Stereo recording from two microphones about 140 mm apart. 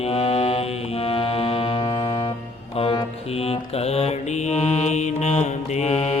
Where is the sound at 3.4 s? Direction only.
45° left (ahead or behind).